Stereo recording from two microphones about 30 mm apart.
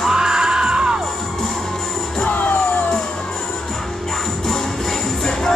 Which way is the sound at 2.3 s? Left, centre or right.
Left.